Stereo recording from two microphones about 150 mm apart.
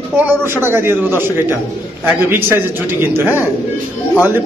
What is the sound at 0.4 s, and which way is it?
Speech, 15° right (ahead or behind).